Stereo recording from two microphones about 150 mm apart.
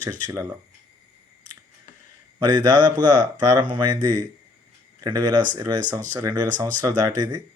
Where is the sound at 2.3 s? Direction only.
25° right (ahead or behind).